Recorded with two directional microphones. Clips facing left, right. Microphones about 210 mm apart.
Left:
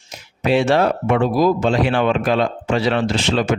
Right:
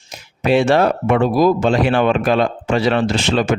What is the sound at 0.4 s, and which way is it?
Speech, 50° right (ahead or behind).